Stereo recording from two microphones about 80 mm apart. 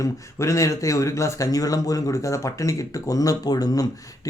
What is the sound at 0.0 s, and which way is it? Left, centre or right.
A man's voice, left.